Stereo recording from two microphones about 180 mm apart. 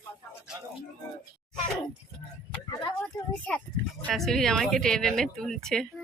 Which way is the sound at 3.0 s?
5° left (ahead or behind).